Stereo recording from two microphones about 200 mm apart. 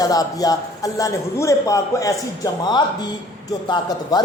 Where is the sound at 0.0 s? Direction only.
20° left (ahead or behind).